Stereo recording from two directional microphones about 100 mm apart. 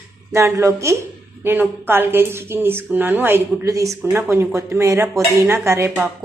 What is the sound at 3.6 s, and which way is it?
A woman's voice, 30° right (ahead or behind).